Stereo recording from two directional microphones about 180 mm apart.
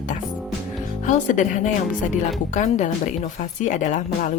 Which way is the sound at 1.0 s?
45° left (ahead or behind).